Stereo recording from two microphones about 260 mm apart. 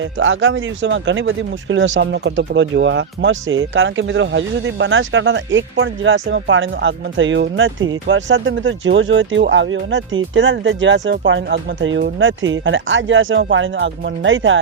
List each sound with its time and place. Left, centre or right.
0.0 s speech: right